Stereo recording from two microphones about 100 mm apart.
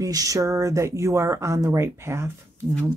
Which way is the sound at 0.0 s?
35° right (ahead or behind).